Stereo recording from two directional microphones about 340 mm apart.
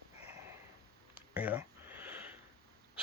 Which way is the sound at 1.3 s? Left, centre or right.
Centre.